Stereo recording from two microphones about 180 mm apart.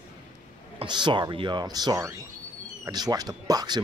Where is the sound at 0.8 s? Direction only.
25° right (ahead or behind).